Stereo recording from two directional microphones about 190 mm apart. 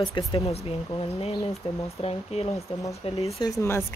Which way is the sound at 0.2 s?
25° left (ahead or behind).